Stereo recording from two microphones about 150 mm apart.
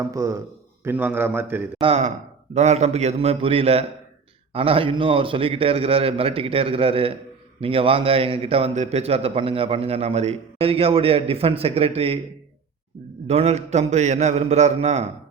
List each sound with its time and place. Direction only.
0.0 s a man's voice: 20° right (ahead or behind)
1.8 s a man's voice: 45° right (ahead or behind)
13.2 s a man's voice: 45° right (ahead or behind)